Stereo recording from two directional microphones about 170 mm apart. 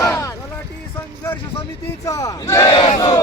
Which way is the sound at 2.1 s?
20° left (ahead or behind).